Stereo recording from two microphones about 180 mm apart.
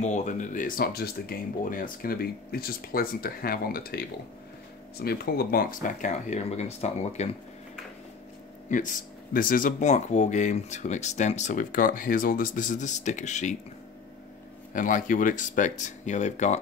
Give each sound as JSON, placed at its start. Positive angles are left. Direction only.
{"t": 0.0, "sound": "speech", "side_deg": 40}
{"t": 8.6, "sound": "speech", "side_deg": 45}
{"t": 14.7, "sound": "speech", "side_deg": 45}